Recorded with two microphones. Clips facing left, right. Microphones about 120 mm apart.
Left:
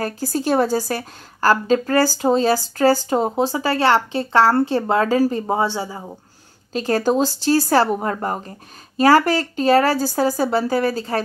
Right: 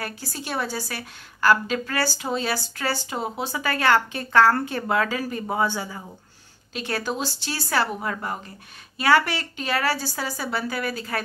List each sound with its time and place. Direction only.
0.0 s a woman's voice: 40° left (ahead or behind)
6.7 s a woman's voice: 35° left (ahead or behind)